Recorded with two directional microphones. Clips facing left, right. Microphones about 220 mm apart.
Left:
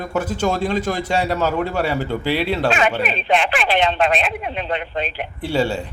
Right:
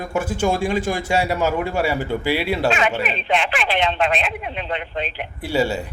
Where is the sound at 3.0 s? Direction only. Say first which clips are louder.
Left 2 dB; 40° left (ahead or behind).